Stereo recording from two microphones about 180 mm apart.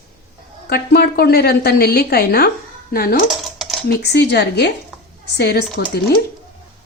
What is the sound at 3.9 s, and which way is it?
A woman's voice, 65° left (ahead or behind).